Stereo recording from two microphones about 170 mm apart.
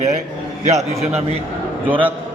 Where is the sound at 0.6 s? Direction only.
40° right (ahead or behind).